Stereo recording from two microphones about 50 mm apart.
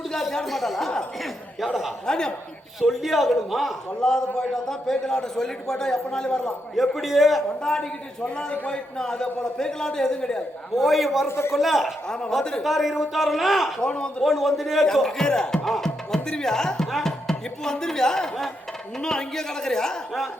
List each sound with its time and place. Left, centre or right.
0.1 s a man's voice: centre
2.0 s a man's voice: centre
2.8 s a man's voice: centre
4.0 s a man's voice: centre
6.8 s a man's voice: centre
7.6 s a man's voice: centre
10.8 s a man's voice: centre
11.3 s speech: left
11.5 s a man's voice: centre
12.0 s a man's voice: centre
12.6 s a man's voice: centre
13.8 s a man's voice: centre
14.2 s a man's voice: centre
14.9 s a man's voice: centre